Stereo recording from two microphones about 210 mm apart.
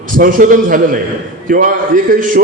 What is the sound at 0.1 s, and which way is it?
A man's voice, 40° right (ahead or behind).